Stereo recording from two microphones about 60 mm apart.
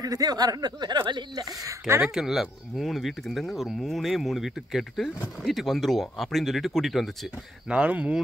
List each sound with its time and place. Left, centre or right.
0.0 s speech: right
2.0 s speech: centre
7.7 s speech: right